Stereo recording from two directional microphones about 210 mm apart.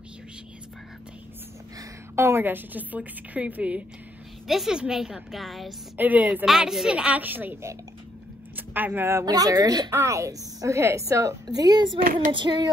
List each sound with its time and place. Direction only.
1.8 s a woman's voice: 15° right (ahead or behind)
12.3 s female singing: 20° right (ahead or behind)